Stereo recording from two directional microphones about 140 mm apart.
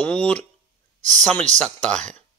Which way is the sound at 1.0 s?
60° right (ahead or behind).